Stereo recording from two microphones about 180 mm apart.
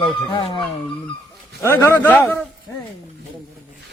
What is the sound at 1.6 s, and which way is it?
Speech, 15° left (ahead or behind).